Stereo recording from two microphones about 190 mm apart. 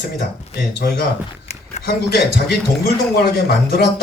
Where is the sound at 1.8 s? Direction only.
60° left (ahead or behind).